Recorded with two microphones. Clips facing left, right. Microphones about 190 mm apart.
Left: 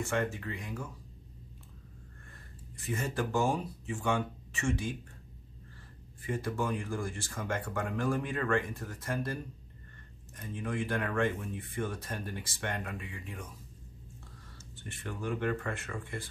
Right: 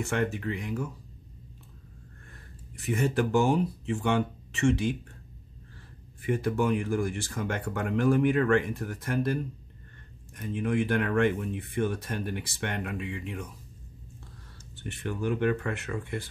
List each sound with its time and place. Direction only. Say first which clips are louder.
0.0 s speech: right 4 dB; 70° right (ahead or behind)
2.7 s speech: right 8 dB; 70° right (ahead or behind)
6.2 s speech: right 7 dB; 70° right (ahead or behind)
10.5 s speech: right 7 dB; 75° right (ahead or behind)
14.8 s speech: right 7 dB; 70° right (ahead or behind)